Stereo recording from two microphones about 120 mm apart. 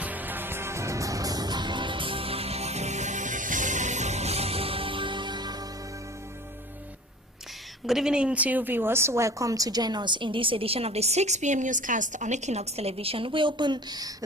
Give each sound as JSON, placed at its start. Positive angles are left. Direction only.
{"t": 0.0, "sound": "music", "side_deg": -15}
{"t": 7.9, "sound": "speech", "side_deg": -5}